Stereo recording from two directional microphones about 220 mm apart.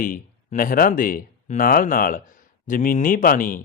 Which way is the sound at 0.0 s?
40° left (ahead or behind).